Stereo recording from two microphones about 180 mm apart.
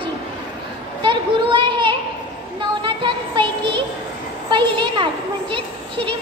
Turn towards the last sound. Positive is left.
turn(degrees=-25)  # may be behind; listen again after turning